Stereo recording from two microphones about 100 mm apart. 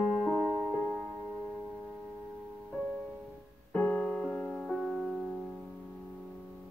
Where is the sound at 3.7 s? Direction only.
15° left (ahead or behind); by 5.5 s centre (ahead or behind).